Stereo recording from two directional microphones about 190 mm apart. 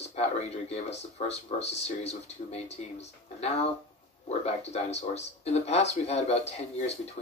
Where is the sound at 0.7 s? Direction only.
35° left (ahead or behind).